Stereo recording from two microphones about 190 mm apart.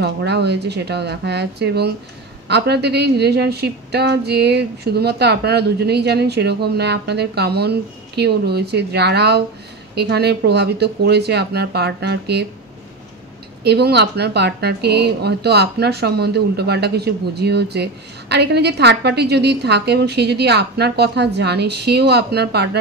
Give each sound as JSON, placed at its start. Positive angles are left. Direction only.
{"t": 0.0, "sound": "a woman's voice", "side_deg": -60}
{"t": 13.7, "sound": "a woman's voice", "side_deg": -60}